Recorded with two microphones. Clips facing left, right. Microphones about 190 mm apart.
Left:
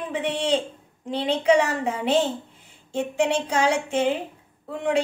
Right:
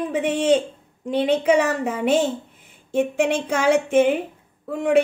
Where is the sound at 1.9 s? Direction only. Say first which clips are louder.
Right 2 dB; 50° right (ahead or behind).